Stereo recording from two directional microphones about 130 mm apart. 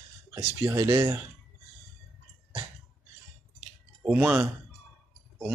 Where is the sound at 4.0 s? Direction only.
10° right (ahead or behind).